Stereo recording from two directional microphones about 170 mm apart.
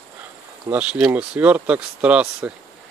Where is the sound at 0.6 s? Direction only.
5° right (ahead or behind).